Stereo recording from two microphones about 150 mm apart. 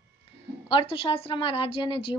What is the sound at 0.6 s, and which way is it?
A woman's voice, 35° left (ahead or behind).